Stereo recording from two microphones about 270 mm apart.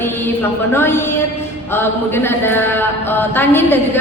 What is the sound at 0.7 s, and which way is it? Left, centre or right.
Mantra, centre.